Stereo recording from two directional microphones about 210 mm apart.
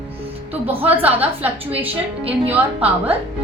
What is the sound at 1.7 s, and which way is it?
Speech, 25° right (ahead or behind).